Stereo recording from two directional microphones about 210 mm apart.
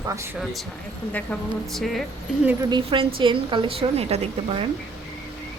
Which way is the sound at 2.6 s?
20° right (ahead or behind).